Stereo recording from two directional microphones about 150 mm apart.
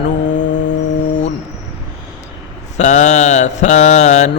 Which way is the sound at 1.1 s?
55° left (ahead or behind).